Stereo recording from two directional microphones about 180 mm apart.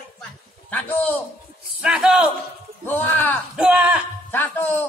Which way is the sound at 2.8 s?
10° left (ahead or behind).